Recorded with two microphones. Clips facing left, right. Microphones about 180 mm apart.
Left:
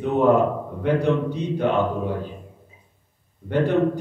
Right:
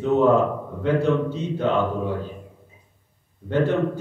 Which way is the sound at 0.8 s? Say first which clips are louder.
Even; 15° left (ahead or behind).